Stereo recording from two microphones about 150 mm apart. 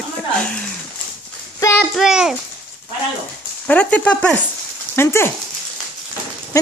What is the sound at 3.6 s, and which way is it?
Speech, 10° left (ahead or behind).